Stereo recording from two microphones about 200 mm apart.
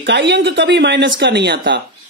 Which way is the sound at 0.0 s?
55° right (ahead or behind).